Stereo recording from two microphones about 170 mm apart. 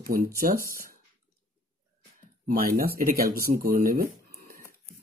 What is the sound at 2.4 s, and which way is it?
Speech, 60° right (ahead or behind).